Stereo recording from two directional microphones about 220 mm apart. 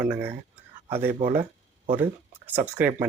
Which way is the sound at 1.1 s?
35° right (ahead or behind).